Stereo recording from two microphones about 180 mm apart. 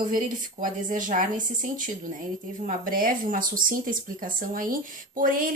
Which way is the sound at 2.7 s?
50° right (ahead or behind).